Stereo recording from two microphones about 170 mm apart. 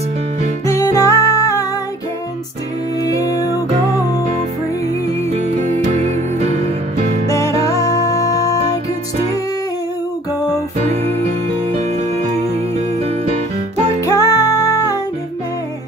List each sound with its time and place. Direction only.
0.7 s music: 20° left (ahead or behind)
3.0 s music: 20° left (ahead or behind)
5.3 s music: 40° right (ahead or behind)
7.2 s music: 20° left (ahead or behind)
11.7 s music: 40° right (ahead or behind)
14.0 s music: 20° left (ahead or behind)